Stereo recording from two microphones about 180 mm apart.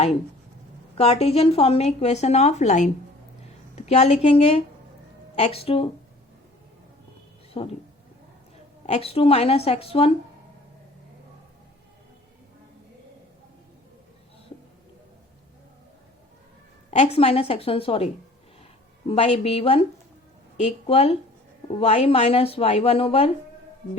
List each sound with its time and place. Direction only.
0.9 s a woman's voice: 35° left (ahead or behind)
7.6 s a woman's voice: 30° left (ahead or behind)
8.9 s a woman's voice: 35° left (ahead or behind)
16.9 s a woman's voice: 35° left (ahead or behind)